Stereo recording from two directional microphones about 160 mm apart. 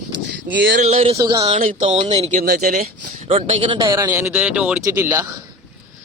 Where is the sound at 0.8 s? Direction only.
40° right (ahead or behind).